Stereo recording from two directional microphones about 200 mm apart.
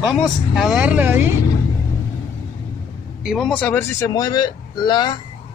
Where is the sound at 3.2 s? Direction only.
Centre (ahead or behind).